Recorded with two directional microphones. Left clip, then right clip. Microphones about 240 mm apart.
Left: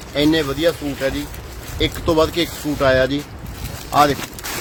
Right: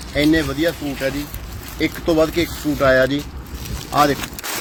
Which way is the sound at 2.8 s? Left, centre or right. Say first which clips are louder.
Right 1 dB; centre.